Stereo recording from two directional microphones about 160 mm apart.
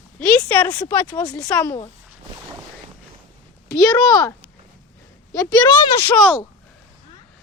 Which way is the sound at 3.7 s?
25° left (ahead or behind).